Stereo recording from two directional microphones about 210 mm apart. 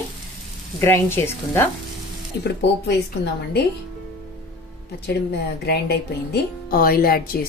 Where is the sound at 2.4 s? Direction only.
55° left (ahead or behind).